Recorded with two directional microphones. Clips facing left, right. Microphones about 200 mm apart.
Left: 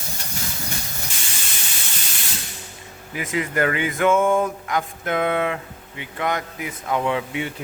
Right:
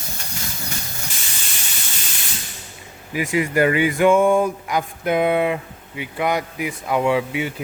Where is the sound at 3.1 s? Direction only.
15° right (ahead or behind).